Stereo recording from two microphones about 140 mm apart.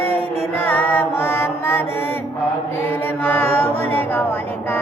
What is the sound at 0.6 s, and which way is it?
Mantra, 15° left (ahead or behind).